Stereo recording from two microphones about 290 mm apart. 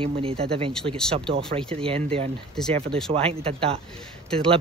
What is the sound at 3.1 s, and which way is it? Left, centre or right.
Speech, centre.